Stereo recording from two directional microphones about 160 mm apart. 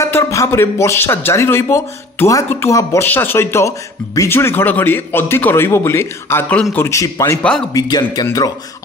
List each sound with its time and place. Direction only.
0.0 s a man's voice: 20° left (ahead or behind)